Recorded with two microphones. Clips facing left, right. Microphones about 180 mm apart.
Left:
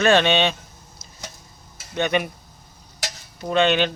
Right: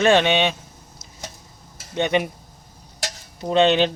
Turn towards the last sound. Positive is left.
turn(degrees=-30)  # may be behind; listen again after turning